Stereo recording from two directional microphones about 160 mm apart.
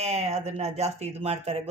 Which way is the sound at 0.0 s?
40° right (ahead or behind).